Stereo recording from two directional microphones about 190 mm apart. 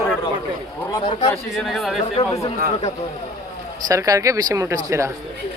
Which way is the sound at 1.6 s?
Centre (ahead or behind).